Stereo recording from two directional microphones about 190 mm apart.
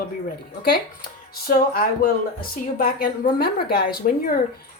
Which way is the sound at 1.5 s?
50° left (ahead or behind).